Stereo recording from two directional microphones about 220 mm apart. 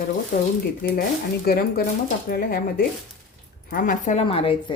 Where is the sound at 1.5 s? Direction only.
45° left (ahead or behind).